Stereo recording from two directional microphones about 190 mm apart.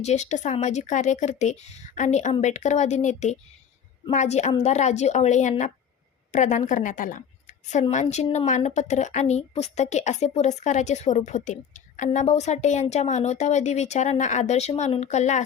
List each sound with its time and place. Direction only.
0.0 s a woman's voice: 35° left (ahead or behind)